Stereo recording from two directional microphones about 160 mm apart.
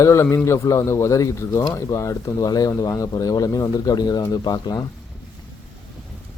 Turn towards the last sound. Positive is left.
turn(degrees=25)  # may be behind; listen again after turning